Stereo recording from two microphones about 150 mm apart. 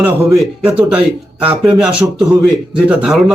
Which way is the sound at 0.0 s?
10° right (ahead or behind).